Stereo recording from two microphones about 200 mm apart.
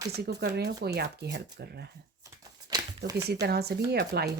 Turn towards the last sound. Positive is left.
turn(degrees=-55)  # may be behind; listen again after turning